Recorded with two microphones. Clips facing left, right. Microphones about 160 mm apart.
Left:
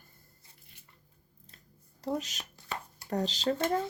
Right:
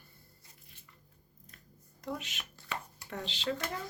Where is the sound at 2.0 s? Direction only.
35° left (ahead or behind).